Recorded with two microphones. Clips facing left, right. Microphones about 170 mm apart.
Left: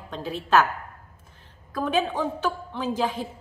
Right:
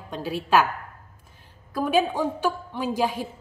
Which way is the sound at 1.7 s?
10° right (ahead or behind).